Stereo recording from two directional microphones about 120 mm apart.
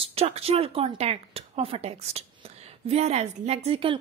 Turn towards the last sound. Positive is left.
turn(degrees=-50)  # may be behind; listen again after turning